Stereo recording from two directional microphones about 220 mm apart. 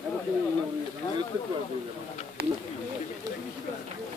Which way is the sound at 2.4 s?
45° right (ahead or behind).